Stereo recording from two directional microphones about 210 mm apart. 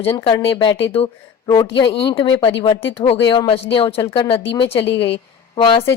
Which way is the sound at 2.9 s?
25° left (ahead or behind).